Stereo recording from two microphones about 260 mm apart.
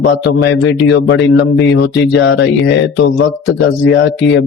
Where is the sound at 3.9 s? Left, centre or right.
Left.